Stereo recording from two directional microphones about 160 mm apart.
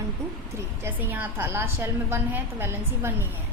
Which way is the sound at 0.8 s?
10° right (ahead or behind).